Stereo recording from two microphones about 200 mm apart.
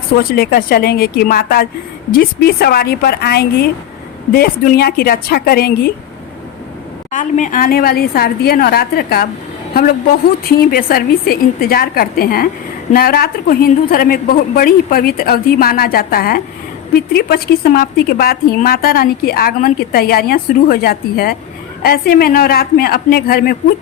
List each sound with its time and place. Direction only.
0.2 s a woman's voice: 50° left (ahead or behind)
7.1 s a woman's voice: 40° left (ahead or behind)
10.6 s a woman's voice: 45° left (ahead or behind)